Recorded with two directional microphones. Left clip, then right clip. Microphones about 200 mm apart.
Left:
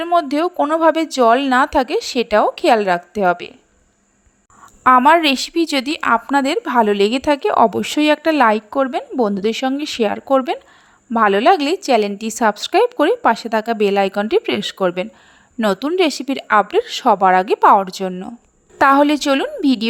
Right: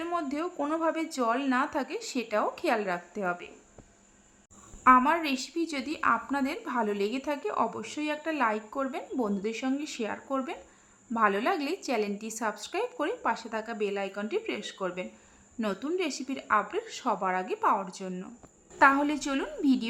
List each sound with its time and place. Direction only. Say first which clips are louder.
0.0 s a woman's voice: left 16 dB; 35° left (ahead or behind)
4.8 s a woman's voice: left 11 dB; 40° left (ahead or behind)